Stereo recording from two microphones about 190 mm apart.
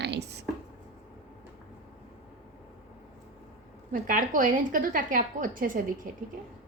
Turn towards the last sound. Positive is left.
turn(degrees=-45)  # may be behind; listen again after turning